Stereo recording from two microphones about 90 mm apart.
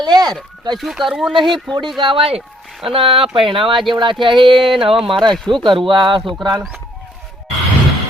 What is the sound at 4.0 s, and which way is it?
Speech, 65° right (ahead or behind).